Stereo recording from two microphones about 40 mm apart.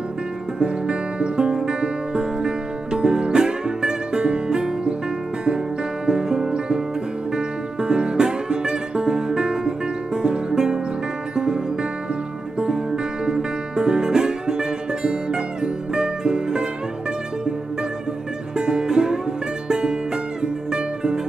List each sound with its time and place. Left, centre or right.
0.6 s music: right
6.0 s music: centre
18.6 s music: right